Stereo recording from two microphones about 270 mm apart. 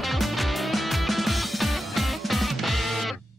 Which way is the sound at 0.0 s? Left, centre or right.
Centre.